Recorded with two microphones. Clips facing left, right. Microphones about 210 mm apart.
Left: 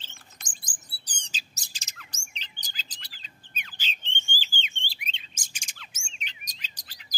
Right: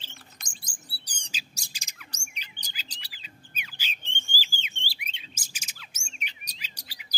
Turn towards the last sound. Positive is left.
turn(degrees=-10)  # may be behind; listen again after turning